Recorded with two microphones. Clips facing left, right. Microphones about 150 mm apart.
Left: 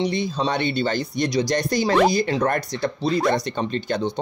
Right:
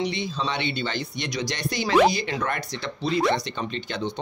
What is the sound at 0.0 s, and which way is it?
Speech, 45° left (ahead or behind).